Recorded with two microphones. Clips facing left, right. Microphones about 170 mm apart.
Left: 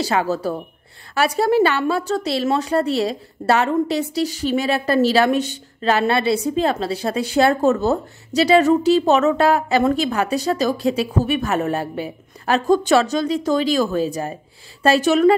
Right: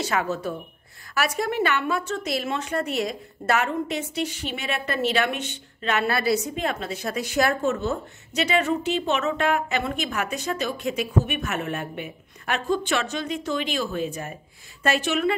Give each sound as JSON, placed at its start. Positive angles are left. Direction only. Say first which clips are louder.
{"t": 0.0, "sound": "a woman's voice", "louder": "left 6 dB", "side_deg": 30}